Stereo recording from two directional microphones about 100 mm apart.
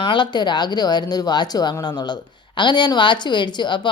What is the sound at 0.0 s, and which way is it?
Speech, 55° left (ahead or behind).